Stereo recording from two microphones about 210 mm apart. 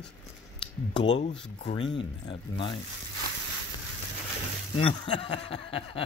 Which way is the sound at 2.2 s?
25° left (ahead or behind).